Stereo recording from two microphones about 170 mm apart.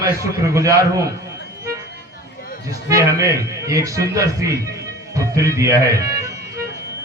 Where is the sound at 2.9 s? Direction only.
20° right (ahead or behind).